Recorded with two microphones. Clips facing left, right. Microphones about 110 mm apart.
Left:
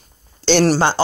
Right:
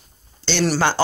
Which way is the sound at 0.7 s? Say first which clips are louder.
Left 3 dB; 25° left (ahead or behind).